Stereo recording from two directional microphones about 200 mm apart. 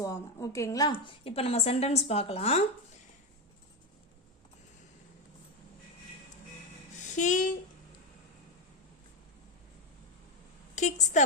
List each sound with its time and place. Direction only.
0.0 s a woman's voice: 15° left (ahead or behind)
6.9 s music: 40° left (ahead or behind)
10.8 s a woman's voice: 35° left (ahead or behind)